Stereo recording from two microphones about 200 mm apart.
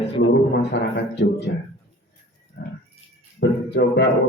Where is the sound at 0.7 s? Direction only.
60° left (ahead or behind).